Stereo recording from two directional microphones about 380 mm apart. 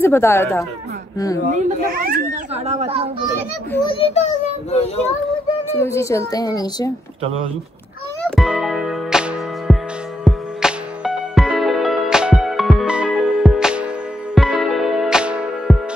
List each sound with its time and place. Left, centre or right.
0.0 s a child's voice: centre
1.5 s a child's voice: right
3.7 s a child's voice: centre
8.4 s music: centre